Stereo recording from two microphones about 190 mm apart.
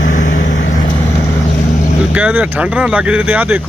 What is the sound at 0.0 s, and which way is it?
Vehicle, 40° left (ahead or behind).